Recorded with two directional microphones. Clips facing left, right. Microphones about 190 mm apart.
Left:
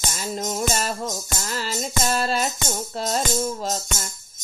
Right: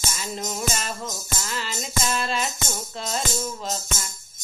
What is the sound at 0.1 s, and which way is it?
Music, 45° left (ahead or behind).